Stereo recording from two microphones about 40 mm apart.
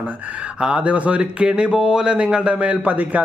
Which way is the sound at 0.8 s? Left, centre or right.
Right.